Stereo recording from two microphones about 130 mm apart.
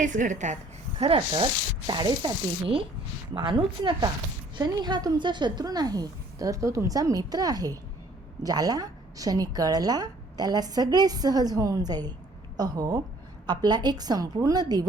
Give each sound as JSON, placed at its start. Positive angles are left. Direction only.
{"t": 0.0, "sound": "a woman's voice", "side_deg": -75}
{"t": 0.9, "sound": "speech", "side_deg": -45}
{"t": 1.9, "sound": "a woman's voice", "side_deg": -35}